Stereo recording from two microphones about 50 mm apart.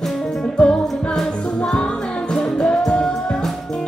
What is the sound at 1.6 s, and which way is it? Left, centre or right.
Music, left.